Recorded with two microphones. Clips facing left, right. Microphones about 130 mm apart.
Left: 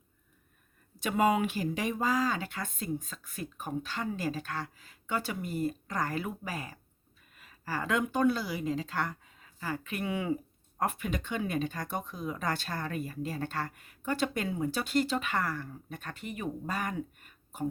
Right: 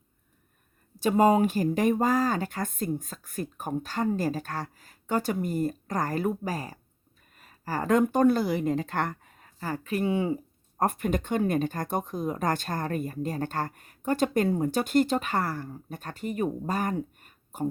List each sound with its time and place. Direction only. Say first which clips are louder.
1.0 s speech: right 6 dB; 35° right (ahead or behind)
10.8 s speech: right 6 dB; 45° right (ahead or behind)